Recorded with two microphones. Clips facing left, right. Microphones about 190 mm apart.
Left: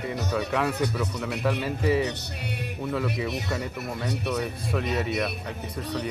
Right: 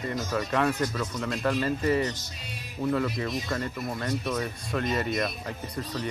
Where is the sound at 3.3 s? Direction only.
70° left (ahead or behind).